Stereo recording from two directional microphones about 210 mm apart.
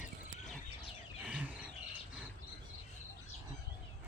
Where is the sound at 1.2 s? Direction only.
5° right (ahead or behind).